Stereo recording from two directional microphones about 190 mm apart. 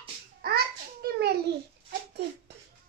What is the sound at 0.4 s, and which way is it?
Babbling, 55° right (ahead or behind).